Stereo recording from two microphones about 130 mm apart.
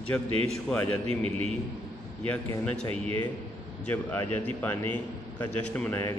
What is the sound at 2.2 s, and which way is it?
Speech, 10° left (ahead or behind).